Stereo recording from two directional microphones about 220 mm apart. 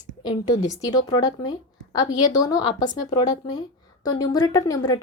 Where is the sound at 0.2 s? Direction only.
20° left (ahead or behind).